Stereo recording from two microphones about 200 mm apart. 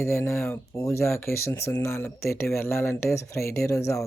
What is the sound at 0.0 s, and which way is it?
A woman's voice, 15° left (ahead or behind).